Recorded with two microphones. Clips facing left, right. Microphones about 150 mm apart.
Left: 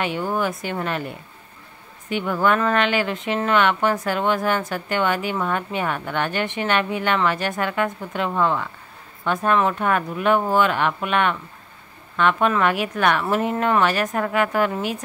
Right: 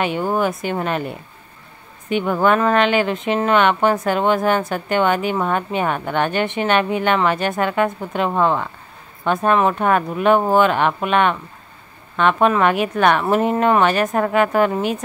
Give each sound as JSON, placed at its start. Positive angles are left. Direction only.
{"t": 0.4, "sound": "a woman's voice", "side_deg": -20}
{"t": 2.4, "sound": "a woman's voice", "side_deg": -20}
{"t": 8.3, "sound": "speech", "side_deg": -40}
{"t": 9.5, "sound": "a woman's voice", "side_deg": -20}